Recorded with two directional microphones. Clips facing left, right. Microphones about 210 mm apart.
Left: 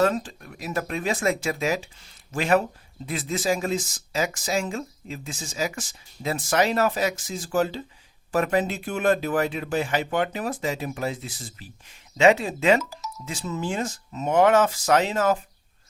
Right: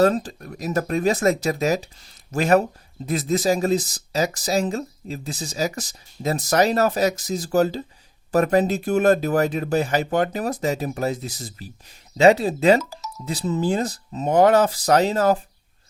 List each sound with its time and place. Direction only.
0.0 s speech: 40° right (ahead or behind)